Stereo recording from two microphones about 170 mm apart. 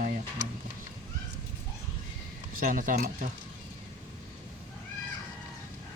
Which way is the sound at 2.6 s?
50° right (ahead or behind).